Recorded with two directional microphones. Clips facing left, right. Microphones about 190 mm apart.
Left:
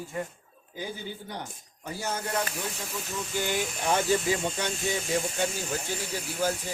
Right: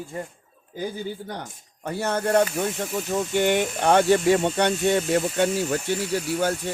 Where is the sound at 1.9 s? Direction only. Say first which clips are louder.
Right 9 dB; 65° right (ahead or behind).